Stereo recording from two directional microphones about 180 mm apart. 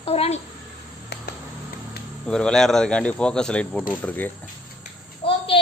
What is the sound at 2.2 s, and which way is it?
Speech, 5° left (ahead or behind).